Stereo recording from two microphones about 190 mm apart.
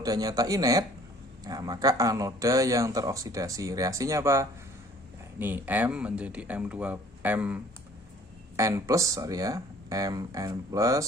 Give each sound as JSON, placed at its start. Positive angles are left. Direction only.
{"t": 0.0, "sound": "speech", "side_deg": -20}